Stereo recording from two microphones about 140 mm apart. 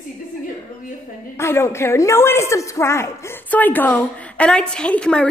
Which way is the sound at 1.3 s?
20° left (ahead or behind).